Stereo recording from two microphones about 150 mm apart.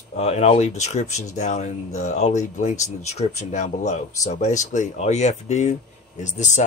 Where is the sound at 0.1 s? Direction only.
45° left (ahead or behind).